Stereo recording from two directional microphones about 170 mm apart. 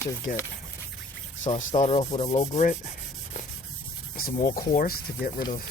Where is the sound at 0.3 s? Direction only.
50° left (ahead or behind).